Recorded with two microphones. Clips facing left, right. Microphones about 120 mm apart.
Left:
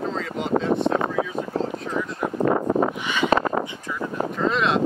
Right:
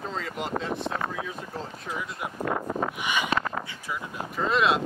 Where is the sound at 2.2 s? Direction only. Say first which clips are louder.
Left 9 dB; 40° left (ahead or behind).